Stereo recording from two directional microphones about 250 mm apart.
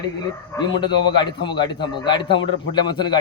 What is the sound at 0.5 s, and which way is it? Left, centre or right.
A man's voice, centre.